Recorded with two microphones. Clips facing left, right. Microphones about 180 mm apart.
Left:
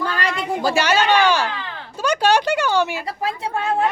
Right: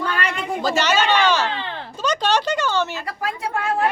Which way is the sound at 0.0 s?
30° left (ahead or behind).